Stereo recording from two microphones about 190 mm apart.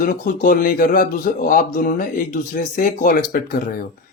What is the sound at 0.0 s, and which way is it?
Speech, 45° left (ahead or behind).